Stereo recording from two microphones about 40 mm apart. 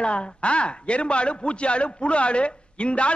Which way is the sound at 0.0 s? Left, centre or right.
Left.